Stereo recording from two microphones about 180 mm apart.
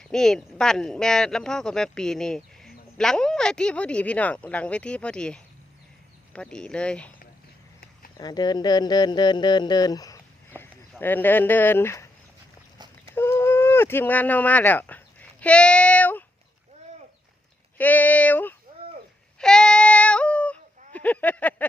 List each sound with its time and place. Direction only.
0.0 s speech: 5° left (ahead or behind)
8.2 s speech: 25° left (ahead or behind)
12.8 s a sound: 25° right (ahead or behind)
13.1 s speech: 15° left (ahead or behind)
17.7 s speech: 10° left (ahead or behind)
19.4 s yodeling: 5° left (ahead or behind)